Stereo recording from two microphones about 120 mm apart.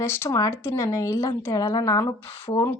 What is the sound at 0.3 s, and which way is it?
A woman's voice, 30° left (ahead or behind).